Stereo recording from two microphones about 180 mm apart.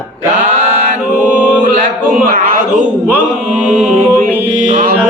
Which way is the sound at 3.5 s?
40° right (ahead or behind).